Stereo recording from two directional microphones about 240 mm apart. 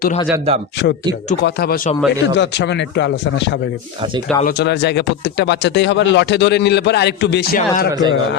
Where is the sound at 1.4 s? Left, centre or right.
Left.